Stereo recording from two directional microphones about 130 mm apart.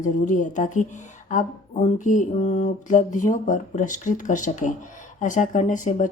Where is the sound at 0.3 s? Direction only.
70° left (ahead or behind).